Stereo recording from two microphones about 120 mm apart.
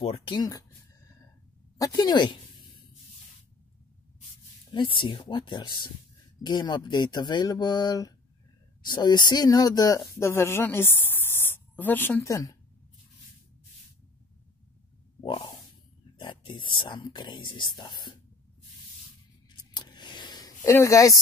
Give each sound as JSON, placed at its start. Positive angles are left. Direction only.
{"t": 0.0, "sound": "speech", "side_deg": 50}
{"t": 0.4, "sound": "a sound", "side_deg": 30}
{"t": 1.8, "sound": "speech", "side_deg": 35}
{"t": 4.7, "sound": "speech", "side_deg": 45}
{"t": 15.2, "sound": "snort", "side_deg": 40}
{"t": 16.2, "sound": "speech", "side_deg": 45}
{"t": 19.5, "sound": "scissors", "side_deg": 40}
{"t": 20.7, "sound": "speech", "side_deg": 25}